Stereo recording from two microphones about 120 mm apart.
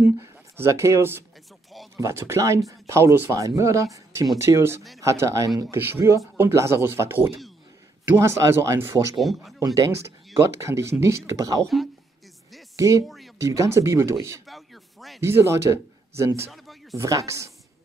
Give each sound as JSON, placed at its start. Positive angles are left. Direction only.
{"t": 0.0, "sound": "speech", "side_deg": -20}
{"t": 9.2, "sound": "speech", "side_deg": 0}
{"t": 9.8, "sound": "speech", "side_deg": -25}
{"t": 11.6, "sound": "speech", "side_deg": 0}
{"t": 12.7, "sound": "speech", "side_deg": -25}
{"t": 14.5, "sound": "a sound", "side_deg": 0}
{"t": 15.2, "sound": "speech", "side_deg": -25}